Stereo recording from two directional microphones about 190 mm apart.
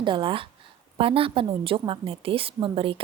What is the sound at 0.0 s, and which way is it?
Speech, 25° right (ahead or behind).